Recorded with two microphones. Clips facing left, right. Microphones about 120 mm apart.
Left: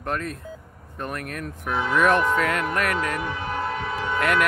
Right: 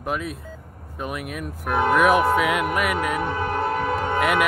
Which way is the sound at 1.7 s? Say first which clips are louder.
Right 5 dB; 55° right (ahead or behind).